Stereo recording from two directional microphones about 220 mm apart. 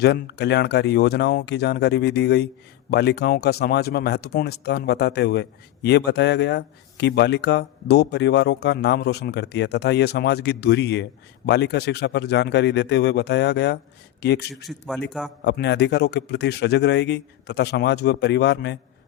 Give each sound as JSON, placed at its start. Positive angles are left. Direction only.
{"t": 0.0, "sound": "speech", "side_deg": 50}
{"t": 14.5, "sound": "a man's voice", "side_deg": 0}
{"t": 15.4, "sound": "speech", "side_deg": 50}